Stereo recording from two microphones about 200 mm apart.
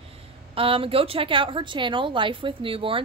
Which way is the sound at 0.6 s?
25° right (ahead or behind).